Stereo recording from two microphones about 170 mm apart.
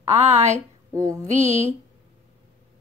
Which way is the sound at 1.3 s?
45° right (ahead or behind).